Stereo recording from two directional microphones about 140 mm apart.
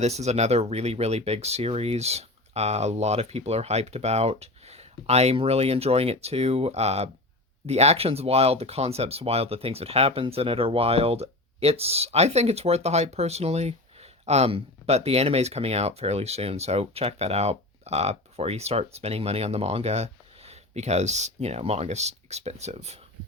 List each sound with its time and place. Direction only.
0.0 s speech: 50° right (ahead or behind)